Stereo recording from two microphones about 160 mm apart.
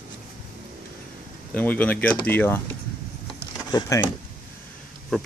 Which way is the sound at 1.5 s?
10° left (ahead or behind).